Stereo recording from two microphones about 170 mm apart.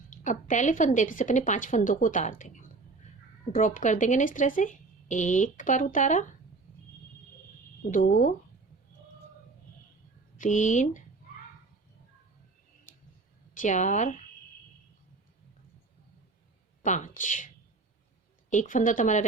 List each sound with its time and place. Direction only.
0.1 s speech: 45° left (ahead or behind)
7.9 s speech: 50° left (ahead or behind)
10.3 s speech: 50° left (ahead or behind)
13.5 s a woman's voice: 45° left (ahead or behind)
16.8 s speech: 45° left (ahead or behind)
18.5 s speech: 50° left (ahead or behind)